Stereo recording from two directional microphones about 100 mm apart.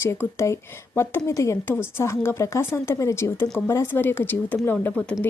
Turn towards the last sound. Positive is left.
turn(degrees=20)  # may be behind; listen again after turning